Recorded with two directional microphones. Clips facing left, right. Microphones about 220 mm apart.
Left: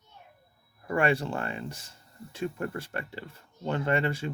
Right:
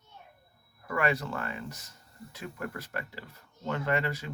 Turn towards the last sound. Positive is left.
turn(degrees=30)  # may be behind; listen again after turning